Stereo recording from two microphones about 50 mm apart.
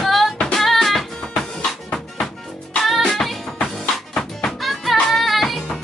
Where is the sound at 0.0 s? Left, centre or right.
Centre.